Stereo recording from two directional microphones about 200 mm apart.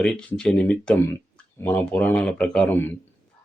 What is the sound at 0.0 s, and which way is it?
Speech, 5° left (ahead or behind).